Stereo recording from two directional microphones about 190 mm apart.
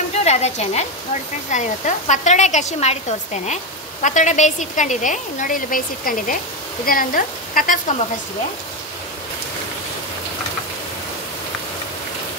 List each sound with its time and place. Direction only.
0.1 s a woman's voice: 35° left (ahead or behind)